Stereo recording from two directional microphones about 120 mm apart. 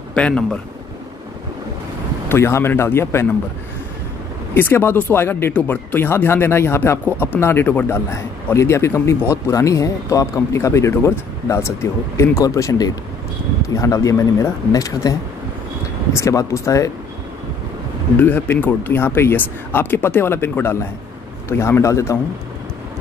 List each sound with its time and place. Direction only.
0.1 s speech: 10° left (ahead or behind)
2.2 s speech: 20° left (ahead or behind)
4.6 s speech: 20° left (ahead or behind)
16.2 s speech: 25° left (ahead or behind)
18.1 s speech: 15° left (ahead or behind)